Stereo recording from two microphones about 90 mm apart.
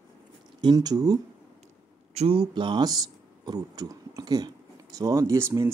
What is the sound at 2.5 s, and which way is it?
Speech, 60° right (ahead or behind).